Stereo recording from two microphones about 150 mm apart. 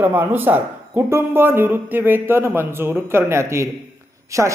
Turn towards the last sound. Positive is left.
turn(degrees=-20)  # may be behind; listen again after turning